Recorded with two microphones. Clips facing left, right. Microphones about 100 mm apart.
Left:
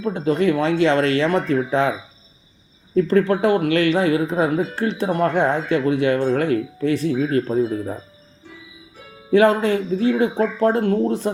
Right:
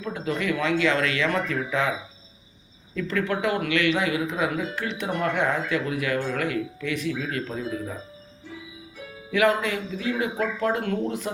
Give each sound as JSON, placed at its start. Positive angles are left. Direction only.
{"t": 0.0, "sound": "speech", "side_deg": 30}
{"t": 9.3, "sound": "speech", "side_deg": 35}